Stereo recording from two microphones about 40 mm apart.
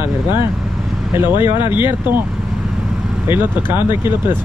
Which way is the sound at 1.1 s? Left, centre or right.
Right.